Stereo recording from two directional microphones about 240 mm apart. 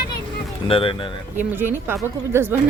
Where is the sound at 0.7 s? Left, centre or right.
Left.